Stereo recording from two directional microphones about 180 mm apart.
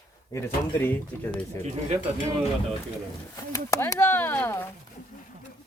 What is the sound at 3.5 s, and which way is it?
Speech, 15° left (ahead or behind).